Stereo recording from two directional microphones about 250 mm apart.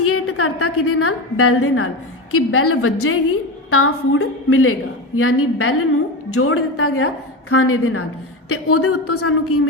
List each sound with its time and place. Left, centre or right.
0.0 s a woman's voice: left